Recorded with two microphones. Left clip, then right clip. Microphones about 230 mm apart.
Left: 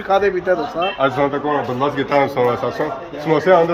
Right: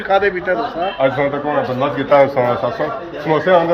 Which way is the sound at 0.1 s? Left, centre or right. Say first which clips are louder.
Right 1 dB; left.